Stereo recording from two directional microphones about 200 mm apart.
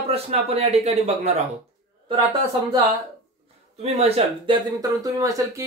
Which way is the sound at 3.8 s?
30° right (ahead or behind).